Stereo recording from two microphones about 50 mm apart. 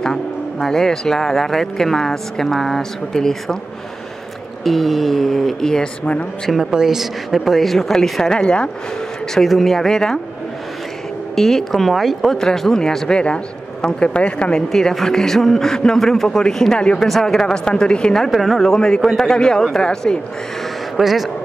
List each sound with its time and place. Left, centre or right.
0.0 s speech: centre
4.6 s a woman's voice: centre
6.7 s a woman's voice: centre
8.4 s speech: centre
9.3 s speech: centre
11.3 s a woman's voice: centre
12.4 s speech: centre
14.7 s speech: centre
17.0 s speech: centre
18.3 s a woman's voice: centre
19.2 s speech: centre
20.9 s speech: centre